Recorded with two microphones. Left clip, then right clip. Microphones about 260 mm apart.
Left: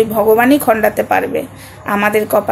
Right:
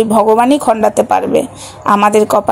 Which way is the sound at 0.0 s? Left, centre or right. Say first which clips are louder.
Right 2 dB; right.